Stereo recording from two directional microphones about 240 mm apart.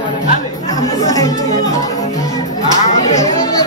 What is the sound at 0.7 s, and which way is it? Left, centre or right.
Speech, centre.